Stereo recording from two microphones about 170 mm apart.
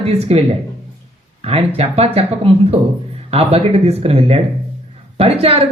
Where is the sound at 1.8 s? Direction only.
40° right (ahead or behind).